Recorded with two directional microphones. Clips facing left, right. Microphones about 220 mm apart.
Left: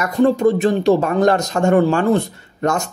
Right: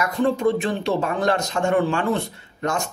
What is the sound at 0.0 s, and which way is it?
Speech, 45° left (ahead or behind).